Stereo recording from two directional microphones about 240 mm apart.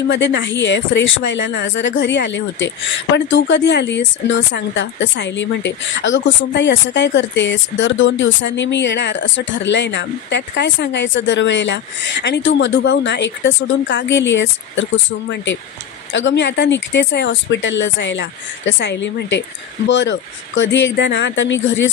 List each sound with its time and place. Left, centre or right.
0.1 s speech: left